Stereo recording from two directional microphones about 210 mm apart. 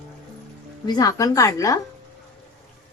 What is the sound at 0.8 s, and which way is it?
Speech, 15° left (ahead or behind).